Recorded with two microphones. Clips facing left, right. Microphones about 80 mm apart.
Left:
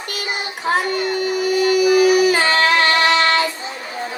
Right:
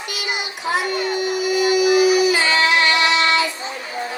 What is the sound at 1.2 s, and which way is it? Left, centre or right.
Singing, left.